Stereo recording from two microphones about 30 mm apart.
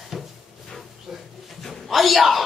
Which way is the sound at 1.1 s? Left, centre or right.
Centre.